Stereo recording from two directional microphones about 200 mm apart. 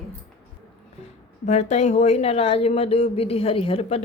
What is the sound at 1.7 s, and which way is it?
A woman's voice, 35° left (ahead or behind).